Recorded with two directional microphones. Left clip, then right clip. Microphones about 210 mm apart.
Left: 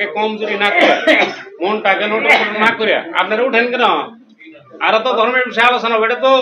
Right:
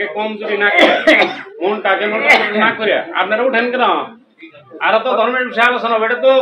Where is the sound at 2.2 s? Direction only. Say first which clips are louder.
Right 2 dB; 55° right (ahead or behind).